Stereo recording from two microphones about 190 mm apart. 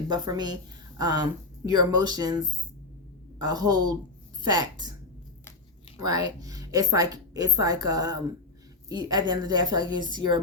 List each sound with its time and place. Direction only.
0.1 s a woman's voice: 20° right (ahead or behind)
6.0 s a woman's voice: 20° right (ahead or behind)